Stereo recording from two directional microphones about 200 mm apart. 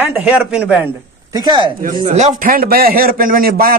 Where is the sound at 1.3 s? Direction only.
20° right (ahead or behind).